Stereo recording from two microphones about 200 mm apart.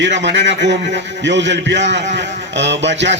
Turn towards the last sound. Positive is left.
turn(degrees=-60)  # may be behind; listen again after turning